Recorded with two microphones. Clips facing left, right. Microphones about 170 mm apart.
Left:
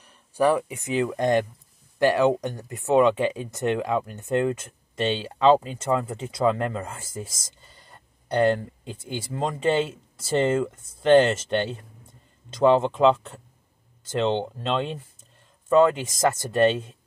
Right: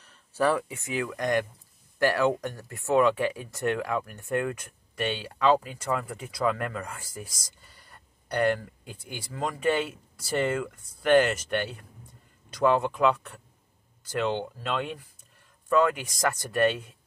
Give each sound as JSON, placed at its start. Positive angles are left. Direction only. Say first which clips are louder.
{"t": 0.0, "sound": "speech", "louder": "left 4 dB", "side_deg": 15}